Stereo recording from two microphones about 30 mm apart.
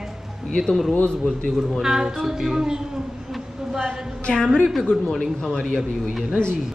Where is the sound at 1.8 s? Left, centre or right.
Centre.